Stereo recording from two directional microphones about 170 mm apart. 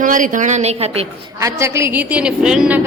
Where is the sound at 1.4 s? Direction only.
15° right (ahead or behind).